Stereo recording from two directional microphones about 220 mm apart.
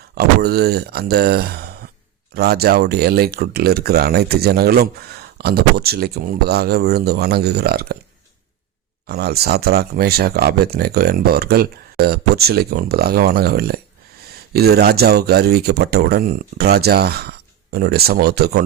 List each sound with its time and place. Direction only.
0.1 s speech: 45° right (ahead or behind)
9.0 s speech: 45° right (ahead or behind)